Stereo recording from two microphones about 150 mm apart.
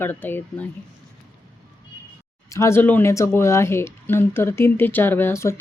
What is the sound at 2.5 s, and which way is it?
Speech, 20° left (ahead or behind).